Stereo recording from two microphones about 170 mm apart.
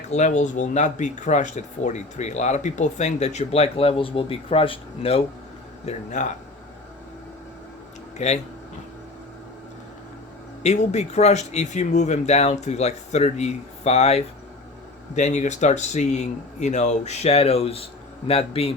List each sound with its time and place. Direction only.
0.1 s speech: 45° left (ahead or behind)
5.8 s speech: 45° left (ahead or behind)
8.2 s speech: 45° left (ahead or behind)
10.6 s speech: 40° left (ahead or behind)